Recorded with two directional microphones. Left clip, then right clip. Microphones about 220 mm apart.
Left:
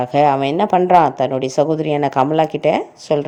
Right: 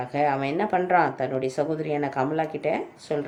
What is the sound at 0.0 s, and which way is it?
Speech, 35° left (ahead or behind).